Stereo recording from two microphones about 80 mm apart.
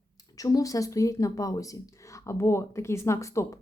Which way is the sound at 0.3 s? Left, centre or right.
Left.